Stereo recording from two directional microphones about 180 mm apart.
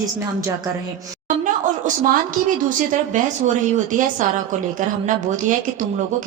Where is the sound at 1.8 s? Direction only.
45° right (ahead or behind).